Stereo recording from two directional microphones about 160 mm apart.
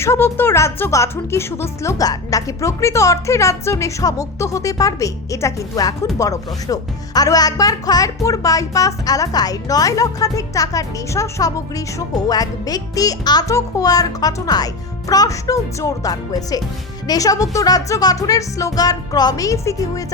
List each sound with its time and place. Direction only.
0.0 s speech: 15° left (ahead or behind)